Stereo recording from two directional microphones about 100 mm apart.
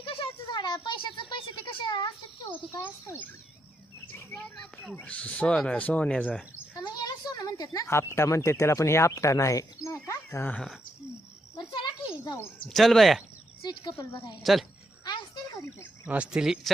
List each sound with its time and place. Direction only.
0.0 s a sound: 60° left (ahead or behind)
0.9 s a child's voice: 50° left (ahead or behind)
2.5 s speech: 25° left (ahead or behind)
6.7 s speech: 40° left (ahead or behind)
9.8 s a sound: 30° left (ahead or behind)
10.5 s speech: 5° left (ahead or behind)
12.2 s speech: 30° left (ahead or behind)
12.6 s speech: 5° left (ahead or behind)
13.6 s a child's voice: 45° left (ahead or behind)
14.5 s speech: centre (ahead or behind)
16.0 s speech: 10° right (ahead or behind)